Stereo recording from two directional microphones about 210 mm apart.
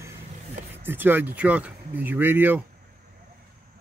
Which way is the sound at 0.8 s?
10° right (ahead or behind).